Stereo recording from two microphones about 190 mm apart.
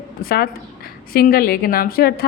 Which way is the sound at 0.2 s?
50° left (ahead or behind).